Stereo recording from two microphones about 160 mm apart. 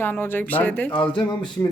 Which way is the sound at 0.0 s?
15° left (ahead or behind).